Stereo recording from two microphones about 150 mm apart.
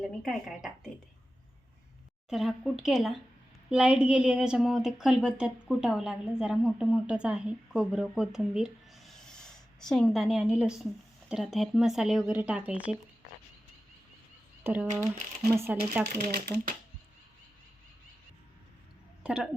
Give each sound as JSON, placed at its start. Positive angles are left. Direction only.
{"t": 0.2, "sound": "a woman's voice", "side_deg": 0}
{"t": 2.3, "sound": "a woman's voice", "side_deg": 0}
{"t": 14.6, "sound": "speech", "side_deg": -10}
{"t": 16.0, "sound": "speech", "side_deg": -90}
{"t": 19.2, "sound": "speech", "side_deg": -5}